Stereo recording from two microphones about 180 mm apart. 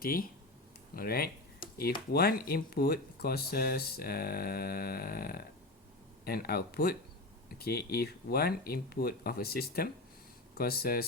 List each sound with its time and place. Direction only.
0.0 s speech: 50° left (ahead or behind)